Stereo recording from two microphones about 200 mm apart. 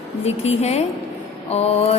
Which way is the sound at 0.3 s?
30° left (ahead or behind).